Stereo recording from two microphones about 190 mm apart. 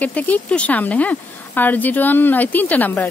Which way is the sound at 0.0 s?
10° left (ahead or behind).